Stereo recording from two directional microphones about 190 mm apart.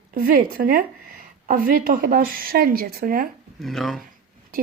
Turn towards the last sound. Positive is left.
turn(degrees=0)  # may be behind; listen again after turning